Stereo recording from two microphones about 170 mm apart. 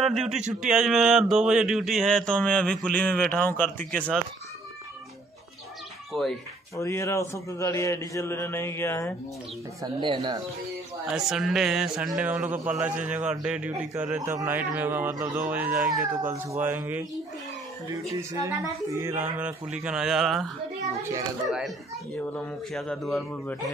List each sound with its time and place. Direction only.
0.0 s speech: centre (ahead or behind)
6.1 s speech: 5° left (ahead or behind)
6.8 s a man's voice: 15° left (ahead or behind)
9.9 s speech: 30° right (ahead or behind)
11.1 s a man's voice: 5° right (ahead or behind)
21.5 s speech: centre (ahead or behind)